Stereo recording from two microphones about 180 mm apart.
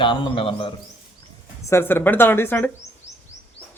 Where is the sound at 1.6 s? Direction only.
15° left (ahead or behind).